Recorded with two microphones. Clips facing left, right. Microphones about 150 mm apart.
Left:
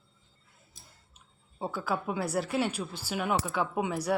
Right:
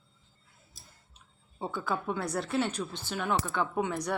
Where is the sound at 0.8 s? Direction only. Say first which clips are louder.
Even; 40° right (ahead or behind).